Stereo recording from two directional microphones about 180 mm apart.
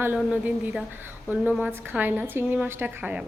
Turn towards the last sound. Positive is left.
turn(degrees=-10)  # may be behind; listen again after turning